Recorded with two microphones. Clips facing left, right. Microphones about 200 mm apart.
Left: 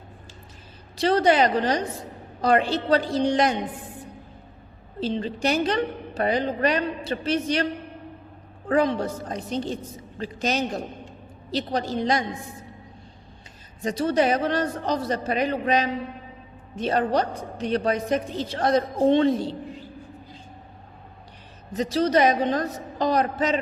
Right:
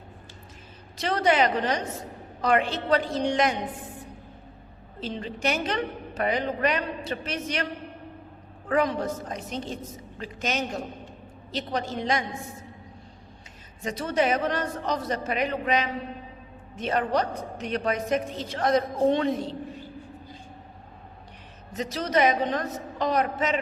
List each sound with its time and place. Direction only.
0.9 s a woman's voice: 35° left (ahead or behind)
4.9 s a woman's voice: 35° left (ahead or behind)
8.7 s a woman's voice: 30° left (ahead or behind)
13.8 s a woman's voice: 35° left (ahead or behind)
21.7 s a woman's voice: 35° left (ahead or behind)